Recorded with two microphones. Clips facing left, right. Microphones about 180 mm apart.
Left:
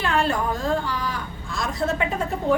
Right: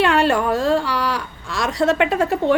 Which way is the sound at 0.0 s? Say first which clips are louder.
Right 6 dB; 75° right (ahead or behind).